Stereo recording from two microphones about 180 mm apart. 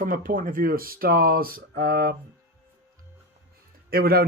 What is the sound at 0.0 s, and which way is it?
Speech, 50° right (ahead or behind).